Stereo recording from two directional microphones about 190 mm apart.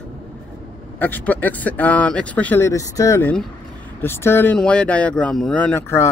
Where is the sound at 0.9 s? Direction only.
10° left (ahead or behind).